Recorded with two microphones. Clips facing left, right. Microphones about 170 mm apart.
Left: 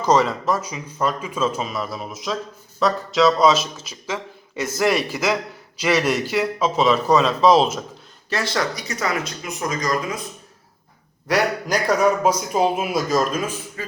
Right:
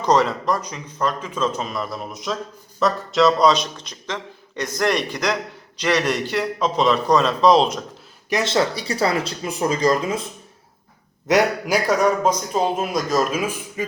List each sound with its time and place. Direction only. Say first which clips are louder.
0.0 s speech: even; centre (ahead or behind)
8.3 s speech: right 4 dB; 20° right (ahead or behind)
11.3 s a man's voice: right 3 dB; 20° right (ahead or behind)
11.7 s speech: left 1 dB; centre (ahead or behind)
13.8 s speech: right 7 dB; 15° right (ahead or behind)